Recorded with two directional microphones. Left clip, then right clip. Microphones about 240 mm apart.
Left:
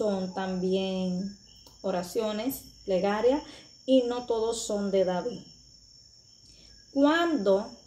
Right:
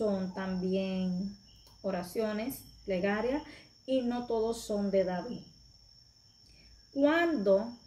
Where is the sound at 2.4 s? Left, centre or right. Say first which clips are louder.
Left 5 dB; centre.